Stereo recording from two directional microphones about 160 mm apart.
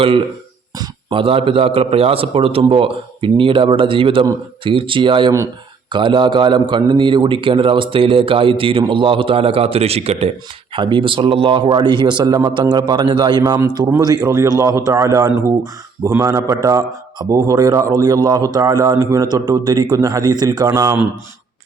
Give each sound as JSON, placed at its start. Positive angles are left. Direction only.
{"t": 0.8, "sound": "a man's voice", "side_deg": -35}